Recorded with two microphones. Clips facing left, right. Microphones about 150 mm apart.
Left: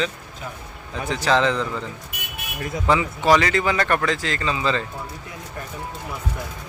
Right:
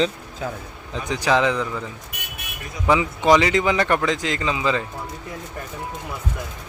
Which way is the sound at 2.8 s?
15° right (ahead or behind).